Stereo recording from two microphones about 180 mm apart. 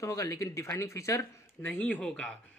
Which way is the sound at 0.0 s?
15° left (ahead or behind).